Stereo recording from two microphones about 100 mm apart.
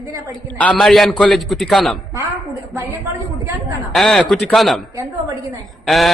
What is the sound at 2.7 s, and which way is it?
Speech, 25° right (ahead or behind).